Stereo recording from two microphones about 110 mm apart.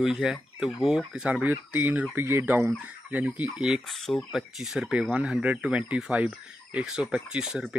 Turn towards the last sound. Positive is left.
turn(degrees=-5)  # may be behind; listen again after turning